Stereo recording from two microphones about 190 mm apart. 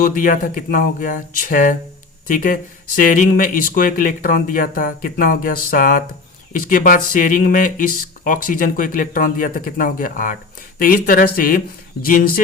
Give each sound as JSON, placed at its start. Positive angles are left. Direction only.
{"t": 0.0, "sound": "speech", "side_deg": 45}